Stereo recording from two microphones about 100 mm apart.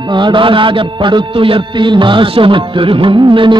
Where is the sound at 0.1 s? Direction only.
55° right (ahead or behind).